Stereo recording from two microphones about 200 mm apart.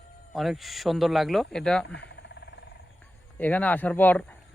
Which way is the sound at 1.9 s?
60° left (ahead or behind).